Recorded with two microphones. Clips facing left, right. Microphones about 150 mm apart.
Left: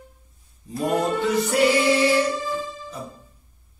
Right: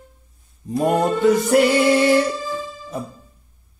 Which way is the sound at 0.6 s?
50° right (ahead or behind).